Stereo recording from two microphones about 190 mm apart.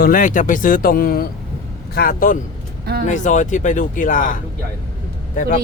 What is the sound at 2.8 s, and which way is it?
Speech, 55° right (ahead or behind).